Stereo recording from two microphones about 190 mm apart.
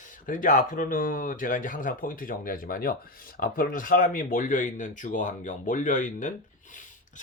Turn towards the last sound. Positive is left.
turn(degrees=40)  # may be behind; listen again after turning